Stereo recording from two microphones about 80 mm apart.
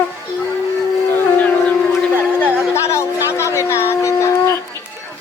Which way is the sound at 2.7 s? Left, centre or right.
Left.